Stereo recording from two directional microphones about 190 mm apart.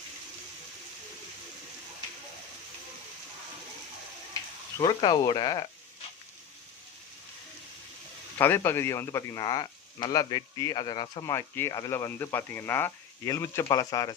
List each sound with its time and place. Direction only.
4.8 s speech: 25° left (ahead or behind)
8.4 s speech: 10° left (ahead or behind)